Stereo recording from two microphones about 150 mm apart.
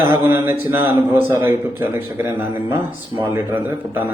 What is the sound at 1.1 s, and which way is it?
Speech, 15° right (ahead or behind).